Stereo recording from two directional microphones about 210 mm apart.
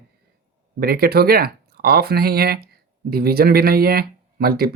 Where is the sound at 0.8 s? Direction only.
45° right (ahead or behind).